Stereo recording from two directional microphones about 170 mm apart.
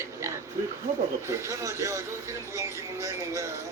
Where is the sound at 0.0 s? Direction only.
15° right (ahead or behind).